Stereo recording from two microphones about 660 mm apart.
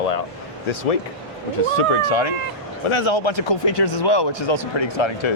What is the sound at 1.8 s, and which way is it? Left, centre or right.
Speech, left.